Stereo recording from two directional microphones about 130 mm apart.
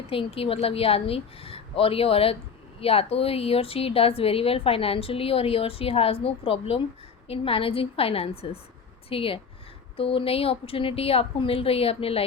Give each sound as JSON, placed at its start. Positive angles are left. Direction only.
{"t": 0.1, "sound": "a woman's voice", "side_deg": 45}